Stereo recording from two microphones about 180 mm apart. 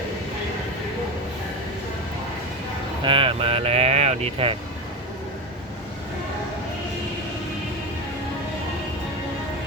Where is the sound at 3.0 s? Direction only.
30° right (ahead or behind).